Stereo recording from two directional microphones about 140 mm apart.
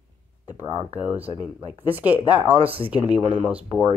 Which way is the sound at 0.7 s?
40° right (ahead or behind).